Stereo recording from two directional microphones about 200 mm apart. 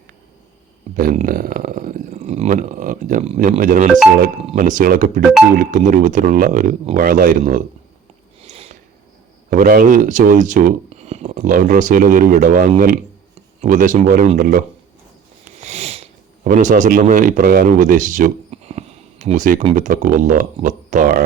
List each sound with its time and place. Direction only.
0.9 s speech: 40° right (ahead or behind)
8.4 s a sound: 30° right (ahead or behind)
9.5 s speech: 45° right (ahead or behind)
11.4 s speech: 45° right (ahead or behind)
15.6 s speech: 35° right (ahead or behind)